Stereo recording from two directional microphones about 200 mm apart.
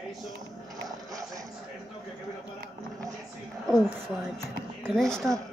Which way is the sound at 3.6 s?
Centre (ahead or behind).